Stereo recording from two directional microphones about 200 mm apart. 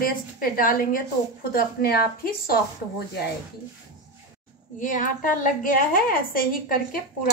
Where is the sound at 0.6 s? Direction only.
45° left (ahead or behind).